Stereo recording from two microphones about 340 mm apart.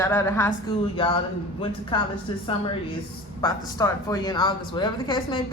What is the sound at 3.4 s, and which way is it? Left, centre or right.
Speech, centre.